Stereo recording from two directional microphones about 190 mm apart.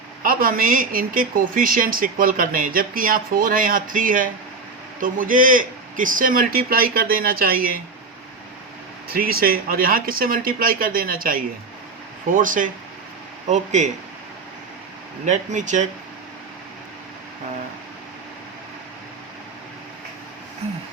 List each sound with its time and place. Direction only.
0.3 s a woman's voice: 50° right (ahead or behind)
9.0 s a woman's voice: 50° right (ahead or behind)
15.2 s speech: 40° right (ahead or behind)